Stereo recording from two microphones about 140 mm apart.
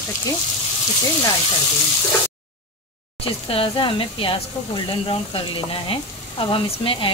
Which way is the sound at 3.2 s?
40° left (ahead or behind).